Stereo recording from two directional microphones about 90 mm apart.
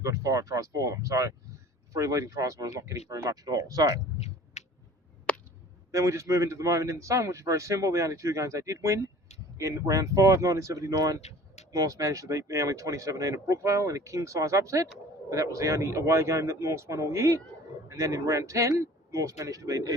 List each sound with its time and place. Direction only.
0.0 s speech: 40° right (ahead or behind)
5.9 s speech: 35° right (ahead or behind)